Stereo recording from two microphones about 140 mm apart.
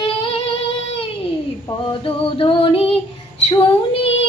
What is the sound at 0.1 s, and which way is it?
Singing, 40° left (ahead or behind).